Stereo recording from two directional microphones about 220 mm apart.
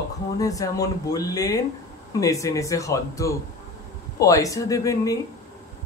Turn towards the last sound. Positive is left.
turn(degrees=15)  # may be behind; listen again after turning